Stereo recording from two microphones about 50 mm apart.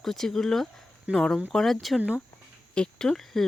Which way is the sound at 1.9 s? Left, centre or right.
Right.